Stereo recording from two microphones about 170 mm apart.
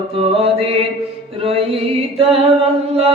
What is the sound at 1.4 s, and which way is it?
Chant, 35° right (ahead or behind).